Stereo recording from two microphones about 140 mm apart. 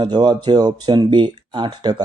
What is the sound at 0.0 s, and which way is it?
Speech, 35° right (ahead or behind).